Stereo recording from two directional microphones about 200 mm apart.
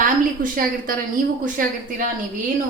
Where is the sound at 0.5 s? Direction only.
45° right (ahead or behind).